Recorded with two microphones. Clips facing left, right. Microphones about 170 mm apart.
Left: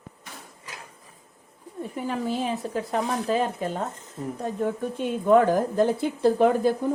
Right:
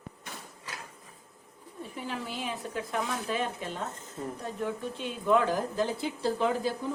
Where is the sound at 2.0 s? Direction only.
45° left (ahead or behind).